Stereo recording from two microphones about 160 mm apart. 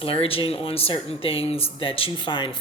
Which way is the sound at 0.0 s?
35° left (ahead or behind).